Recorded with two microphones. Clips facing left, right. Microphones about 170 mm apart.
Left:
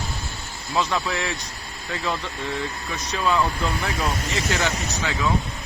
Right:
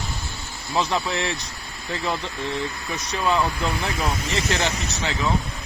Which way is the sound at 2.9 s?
20° right (ahead or behind).